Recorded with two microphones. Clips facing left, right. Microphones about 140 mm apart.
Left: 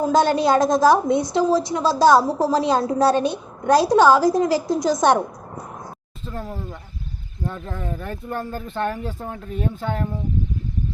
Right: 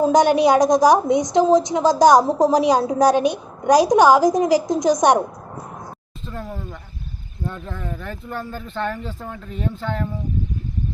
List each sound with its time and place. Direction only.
0.0 s a woman's voice: 15° right (ahead or behind)
6.2 s speech: 10° left (ahead or behind)
7.8 s speech: 15° left (ahead or behind)